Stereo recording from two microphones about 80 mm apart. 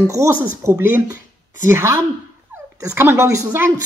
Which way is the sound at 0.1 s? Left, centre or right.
Right.